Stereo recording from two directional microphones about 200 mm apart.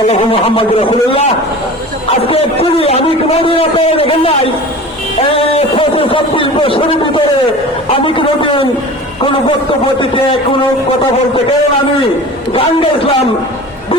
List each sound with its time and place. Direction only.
0.1 s a man's voice: 30° left (ahead or behind)
5.5 s a man's voice: 30° left (ahead or behind)
12.5 s a man's voice: 25° left (ahead or behind)